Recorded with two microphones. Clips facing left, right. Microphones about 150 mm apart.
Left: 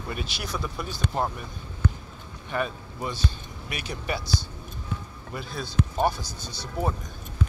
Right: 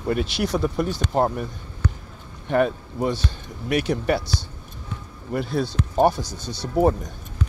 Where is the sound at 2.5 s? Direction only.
70° right (ahead or behind).